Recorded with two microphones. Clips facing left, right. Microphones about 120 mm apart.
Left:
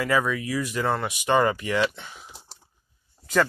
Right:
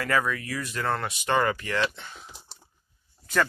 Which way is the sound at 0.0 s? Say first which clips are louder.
Left 3 dB; 10° left (ahead or behind).